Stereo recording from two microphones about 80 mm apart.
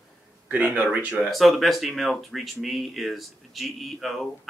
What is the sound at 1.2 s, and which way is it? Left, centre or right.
Speech, centre.